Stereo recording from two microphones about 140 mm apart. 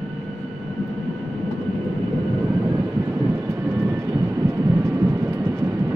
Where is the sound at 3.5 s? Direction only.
20° right (ahead or behind).